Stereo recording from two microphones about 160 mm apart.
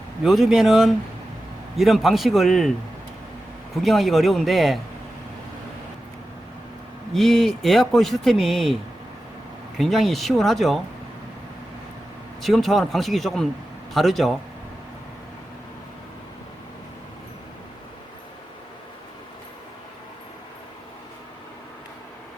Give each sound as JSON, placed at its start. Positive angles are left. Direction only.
{"t": 0.2, "sound": "a man's voice", "side_deg": 0}
{"t": 3.8, "sound": "a man's voice", "side_deg": 0}
{"t": 7.1, "sound": "a man's voice", "side_deg": 0}
{"t": 9.7, "sound": "a man's voice", "side_deg": 0}
{"t": 12.4, "sound": "a man's voice", "side_deg": 0}